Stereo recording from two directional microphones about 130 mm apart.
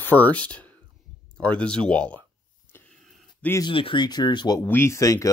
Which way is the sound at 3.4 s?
10° left (ahead or behind).